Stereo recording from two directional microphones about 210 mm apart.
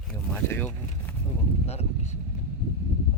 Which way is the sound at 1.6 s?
30° left (ahead or behind).